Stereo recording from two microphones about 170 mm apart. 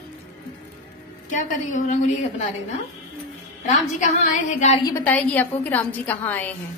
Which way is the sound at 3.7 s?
45° left (ahead or behind).